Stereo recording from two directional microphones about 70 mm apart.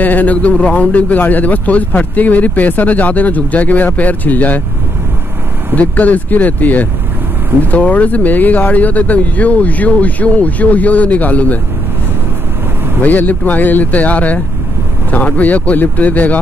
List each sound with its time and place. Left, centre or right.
0.0 s speech: left
5.8 s speech: left
13.0 s speech: left